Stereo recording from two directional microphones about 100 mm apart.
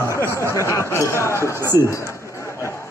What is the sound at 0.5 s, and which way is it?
Speech, 30° left (ahead or behind).